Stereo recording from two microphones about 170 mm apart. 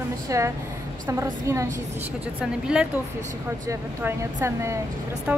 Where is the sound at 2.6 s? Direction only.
5° right (ahead or behind).